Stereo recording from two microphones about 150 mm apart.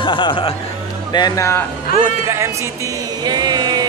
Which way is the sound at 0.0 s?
30° left (ahead or behind).